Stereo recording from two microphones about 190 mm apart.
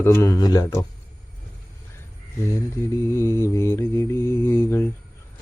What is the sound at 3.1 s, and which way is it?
Mantra, 15° left (ahead or behind).